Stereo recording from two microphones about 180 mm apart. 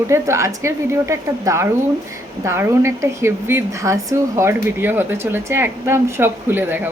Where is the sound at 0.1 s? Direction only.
15° right (ahead or behind).